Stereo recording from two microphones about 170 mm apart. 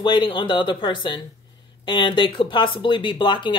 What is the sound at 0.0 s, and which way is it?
Speech, 30° left (ahead or behind).